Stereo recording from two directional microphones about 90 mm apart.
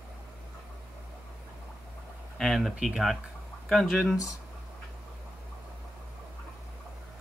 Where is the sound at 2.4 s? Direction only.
Centre (ahead or behind).